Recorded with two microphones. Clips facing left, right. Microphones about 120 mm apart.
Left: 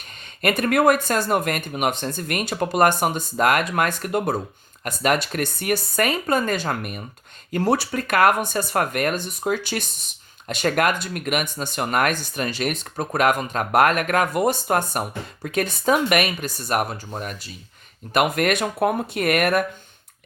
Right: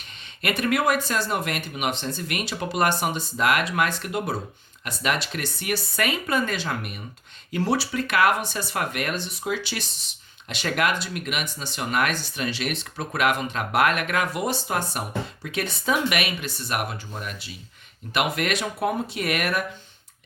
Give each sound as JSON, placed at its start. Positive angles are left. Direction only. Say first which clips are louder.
{"t": 0.4, "sound": "speech", "louder": "left 5 dB", "side_deg": 45}